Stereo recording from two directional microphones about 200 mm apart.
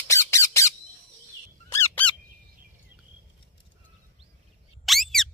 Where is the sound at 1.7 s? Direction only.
10° left (ahead or behind).